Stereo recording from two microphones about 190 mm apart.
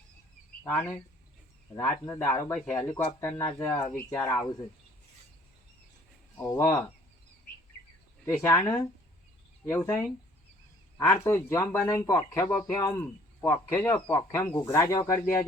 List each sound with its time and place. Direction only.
0.6 s speech: 10° left (ahead or behind)
2.5 s speech: 5° left (ahead or behind)
2.7 s speech: 20° left (ahead or behind)
6.3 s speech: 15° left (ahead or behind)
8.3 s speech: 15° left (ahead or behind)